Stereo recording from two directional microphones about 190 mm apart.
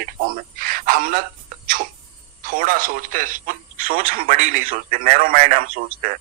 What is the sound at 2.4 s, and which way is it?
Speech, 45° right (ahead or behind).